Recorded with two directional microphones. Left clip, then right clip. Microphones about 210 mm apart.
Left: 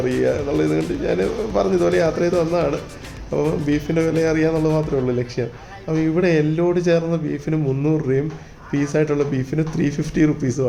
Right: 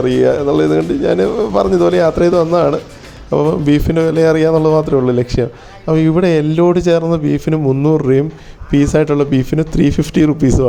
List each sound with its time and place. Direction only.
0.0 s a man's voice: 35° right (ahead or behind)